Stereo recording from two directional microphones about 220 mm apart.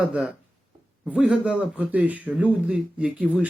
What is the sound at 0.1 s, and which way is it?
Speech, 5° right (ahead or behind).